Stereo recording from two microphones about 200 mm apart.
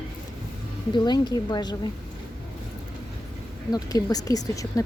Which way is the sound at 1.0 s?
20° left (ahead or behind).